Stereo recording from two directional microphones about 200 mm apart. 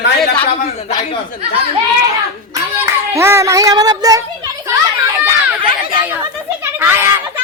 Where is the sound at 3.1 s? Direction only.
15° right (ahead or behind).